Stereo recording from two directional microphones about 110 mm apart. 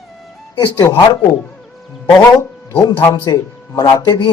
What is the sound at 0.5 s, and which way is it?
Speech, 35° left (ahead or behind).